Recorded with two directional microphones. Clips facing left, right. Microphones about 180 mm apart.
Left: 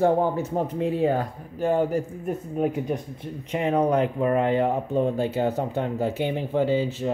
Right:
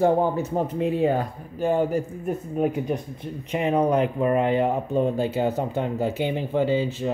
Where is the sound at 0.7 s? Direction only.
15° right (ahead or behind).